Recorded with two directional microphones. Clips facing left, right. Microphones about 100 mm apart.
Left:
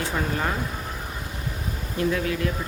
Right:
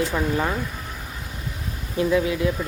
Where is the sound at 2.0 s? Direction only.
15° right (ahead or behind).